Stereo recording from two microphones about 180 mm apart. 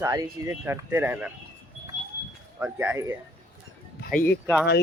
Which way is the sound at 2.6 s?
10° right (ahead or behind).